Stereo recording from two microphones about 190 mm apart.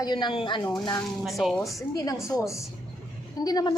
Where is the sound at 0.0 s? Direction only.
20° left (ahead or behind).